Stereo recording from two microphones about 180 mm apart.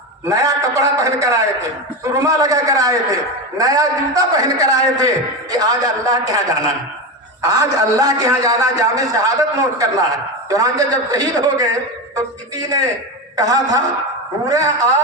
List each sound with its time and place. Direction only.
0.3 s a man's voice: 20° right (ahead or behind)